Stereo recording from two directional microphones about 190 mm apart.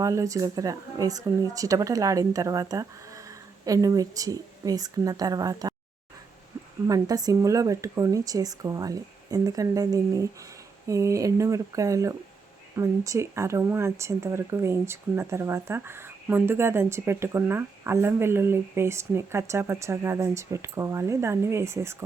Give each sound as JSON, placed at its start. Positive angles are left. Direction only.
{"t": 0.0, "sound": "speech", "side_deg": -15}
{"t": 6.8, "sound": "a woman's voice", "side_deg": -20}